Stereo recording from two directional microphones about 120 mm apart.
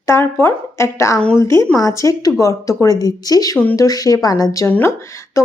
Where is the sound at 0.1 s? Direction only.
20° left (ahead or behind).